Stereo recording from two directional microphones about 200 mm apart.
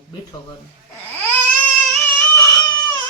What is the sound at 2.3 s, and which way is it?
Baby cry, 15° left (ahead or behind).